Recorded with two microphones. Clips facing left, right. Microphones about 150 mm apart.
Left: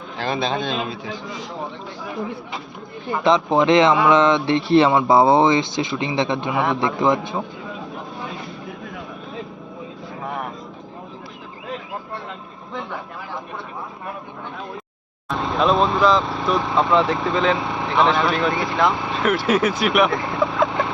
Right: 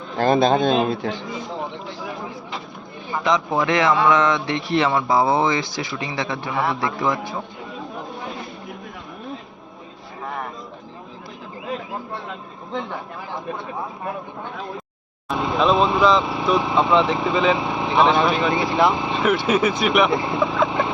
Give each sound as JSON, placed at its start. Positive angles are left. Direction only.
{"t": 0.2, "sound": "a man's voice", "side_deg": -45}
{"t": 0.9, "sound": "speech", "side_deg": -60}
{"t": 3.2, "sound": "speech", "side_deg": 30}
{"t": 15.3, "sound": "speech", "side_deg": 0}
{"t": 19.8, "sound": "speech", "side_deg": 5}
{"t": 20.1, "sound": "speech", "side_deg": -15}
{"t": 20.7, "sound": "vehicle", "side_deg": -15}